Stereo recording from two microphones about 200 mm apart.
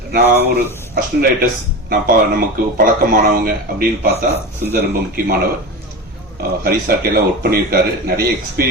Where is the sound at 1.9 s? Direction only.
45° right (ahead or behind).